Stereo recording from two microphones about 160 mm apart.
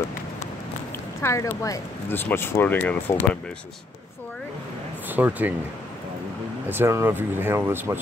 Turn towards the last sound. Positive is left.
turn(degrees=-15)  # may be behind; listen again after turning